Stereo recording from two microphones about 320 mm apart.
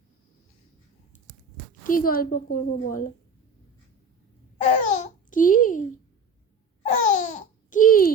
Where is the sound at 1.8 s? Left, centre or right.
Left.